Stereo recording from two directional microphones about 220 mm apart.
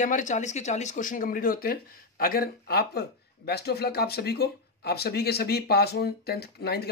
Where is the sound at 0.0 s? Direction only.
35° left (ahead or behind).